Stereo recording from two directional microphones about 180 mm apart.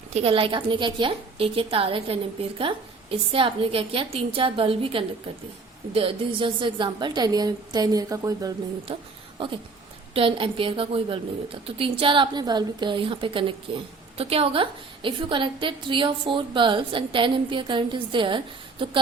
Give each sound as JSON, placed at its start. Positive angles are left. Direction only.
{"t": 0.1, "sound": "a woman's voice", "side_deg": -35}
{"t": 8.9, "sound": "a woman's voice", "side_deg": -30}
{"t": 10.2, "sound": "a woman's voice", "side_deg": -30}